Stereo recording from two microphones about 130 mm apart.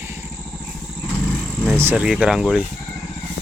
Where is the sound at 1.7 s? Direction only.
15° right (ahead or behind).